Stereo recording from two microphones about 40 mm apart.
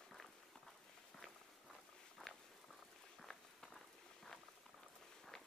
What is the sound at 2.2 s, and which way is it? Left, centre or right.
Walk, left.